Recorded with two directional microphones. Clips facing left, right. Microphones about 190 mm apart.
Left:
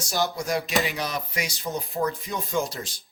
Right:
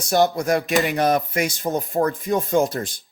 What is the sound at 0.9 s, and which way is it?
Speech, 50° right (ahead or behind).